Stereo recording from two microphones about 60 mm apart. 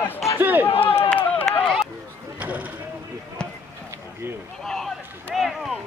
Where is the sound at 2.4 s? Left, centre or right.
Right.